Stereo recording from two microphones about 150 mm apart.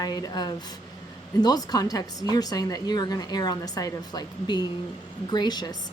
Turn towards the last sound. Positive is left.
turn(degrees=25)  # may be behind; listen again after turning